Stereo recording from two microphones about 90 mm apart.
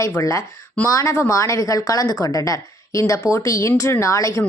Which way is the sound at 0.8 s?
35° left (ahead or behind).